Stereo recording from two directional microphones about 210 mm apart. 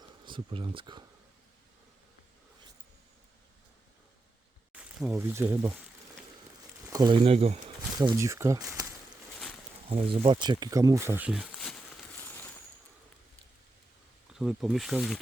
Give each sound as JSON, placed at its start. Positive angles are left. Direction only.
{"t": 0.3, "sound": "speech", "side_deg": -25}
{"t": 4.8, "sound": "speech", "side_deg": -5}
{"t": 6.9, "sound": "speech", "side_deg": -20}
{"t": 7.9, "sound": "speech", "side_deg": -15}
{"t": 9.9, "sound": "speech", "side_deg": -25}
{"t": 14.3, "sound": "speech", "side_deg": 0}